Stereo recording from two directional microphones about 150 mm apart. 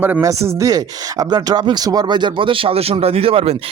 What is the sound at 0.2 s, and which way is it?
Speech, 20° right (ahead or behind).